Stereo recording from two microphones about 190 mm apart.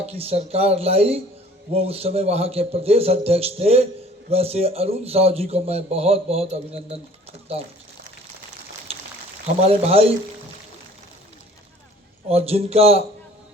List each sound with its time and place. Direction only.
0.0 s speech: 30° right (ahead or behind)
9.6 s speech: 30° right (ahead or behind)
12.3 s speech: 30° right (ahead or behind)